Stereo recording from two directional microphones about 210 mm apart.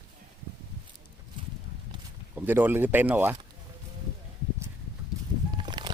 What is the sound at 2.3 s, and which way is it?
Speech, 10° right (ahead or behind).